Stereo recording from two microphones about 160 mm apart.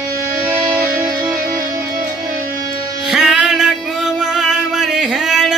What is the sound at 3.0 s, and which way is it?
Music, centre (ahead or behind).